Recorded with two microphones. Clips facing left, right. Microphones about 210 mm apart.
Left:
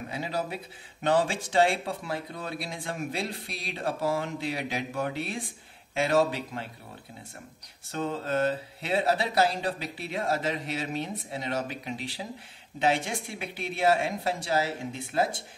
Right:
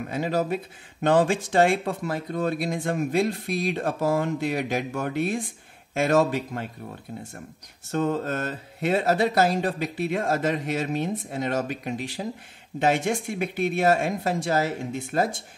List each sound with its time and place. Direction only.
0.1 s speech: 50° right (ahead or behind)
7.9 s speech: 45° right (ahead or behind)